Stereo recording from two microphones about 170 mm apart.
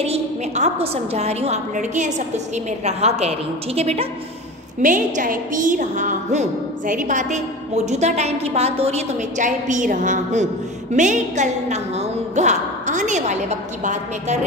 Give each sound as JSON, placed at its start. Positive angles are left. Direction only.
{"t": 0.0, "sound": "a woman's voice", "side_deg": -35}
{"t": 4.8, "sound": "a woman's voice", "side_deg": -50}